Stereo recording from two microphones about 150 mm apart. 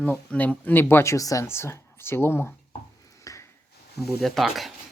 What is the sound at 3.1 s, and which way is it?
Ping, 20° left (ahead or behind).